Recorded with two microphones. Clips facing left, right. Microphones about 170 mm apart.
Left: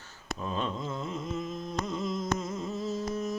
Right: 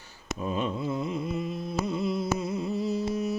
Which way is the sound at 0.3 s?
10° right (ahead or behind).